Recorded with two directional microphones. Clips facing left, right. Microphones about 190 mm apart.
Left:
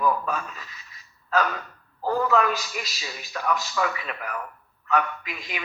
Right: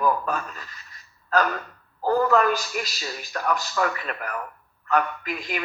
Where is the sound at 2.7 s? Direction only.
45° right (ahead or behind).